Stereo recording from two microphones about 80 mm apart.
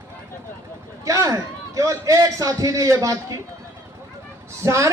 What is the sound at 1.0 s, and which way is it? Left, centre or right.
A man's voice, right.